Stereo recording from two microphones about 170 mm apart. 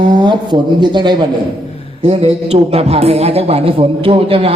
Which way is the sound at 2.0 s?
35° right (ahead or behind).